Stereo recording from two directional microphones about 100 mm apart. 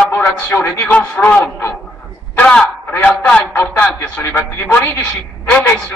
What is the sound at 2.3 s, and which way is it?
A man's voice, 10° left (ahead or behind).